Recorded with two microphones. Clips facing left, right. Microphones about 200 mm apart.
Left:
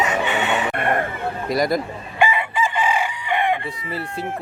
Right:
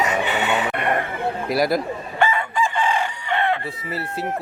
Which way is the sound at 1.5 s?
5° right (ahead or behind).